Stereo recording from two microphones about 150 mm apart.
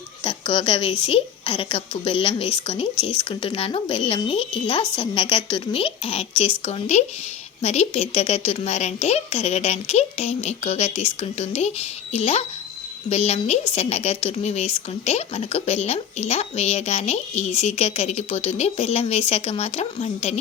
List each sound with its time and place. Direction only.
0.3 s a woman's voice: 35° left (ahead or behind)